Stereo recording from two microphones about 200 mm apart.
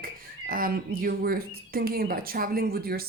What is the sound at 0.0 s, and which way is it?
Speech, 45° right (ahead or behind).